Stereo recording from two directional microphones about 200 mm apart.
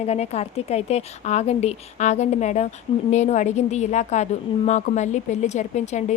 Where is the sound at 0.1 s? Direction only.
35° left (ahead or behind).